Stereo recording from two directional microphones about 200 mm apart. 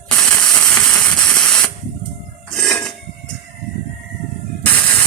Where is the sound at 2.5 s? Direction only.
5° left (ahead or behind).